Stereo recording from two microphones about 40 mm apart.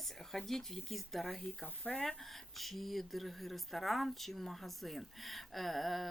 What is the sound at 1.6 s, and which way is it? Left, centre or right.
Speech, left.